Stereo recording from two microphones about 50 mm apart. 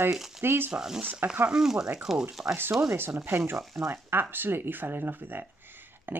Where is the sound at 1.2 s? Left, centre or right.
Right.